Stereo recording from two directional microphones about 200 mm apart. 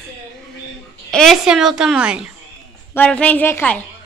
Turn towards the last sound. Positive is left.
turn(degrees=10)  # may be behind; listen again after turning